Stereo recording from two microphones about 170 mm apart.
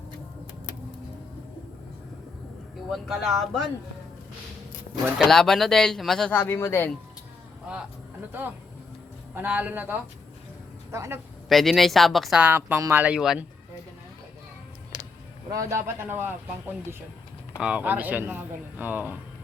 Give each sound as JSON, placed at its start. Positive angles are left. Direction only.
{"t": 2.9, "sound": "speech", "side_deg": 0}
{"t": 5.1, "sound": "a man's voice", "side_deg": 0}
{"t": 9.3, "sound": "speech", "side_deg": -10}
{"t": 11.4, "sound": "speech", "side_deg": 0}
{"t": 15.4, "sound": "a man's voice", "side_deg": -20}
{"t": 17.6, "sound": "speech", "side_deg": -5}